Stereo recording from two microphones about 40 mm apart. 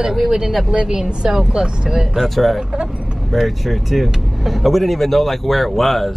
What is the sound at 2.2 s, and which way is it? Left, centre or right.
Speech, centre.